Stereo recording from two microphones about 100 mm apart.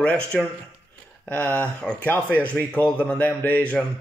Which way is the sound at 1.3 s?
15° left (ahead or behind).